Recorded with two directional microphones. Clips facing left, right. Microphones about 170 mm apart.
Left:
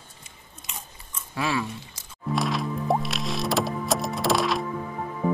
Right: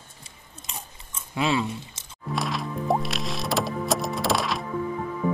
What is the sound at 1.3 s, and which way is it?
Speech, 20° right (ahead or behind).